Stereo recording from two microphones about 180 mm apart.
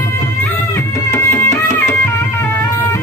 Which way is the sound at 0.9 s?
15° left (ahead or behind).